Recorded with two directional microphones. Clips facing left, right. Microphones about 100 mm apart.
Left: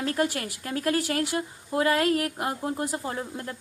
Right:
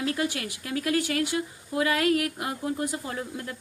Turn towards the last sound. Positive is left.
turn(degrees=30)  # may be behind; listen again after turning